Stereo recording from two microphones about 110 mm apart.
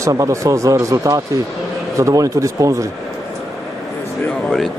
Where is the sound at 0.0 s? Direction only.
30° right (ahead or behind).